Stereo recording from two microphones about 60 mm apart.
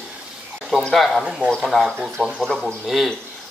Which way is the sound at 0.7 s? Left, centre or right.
Centre.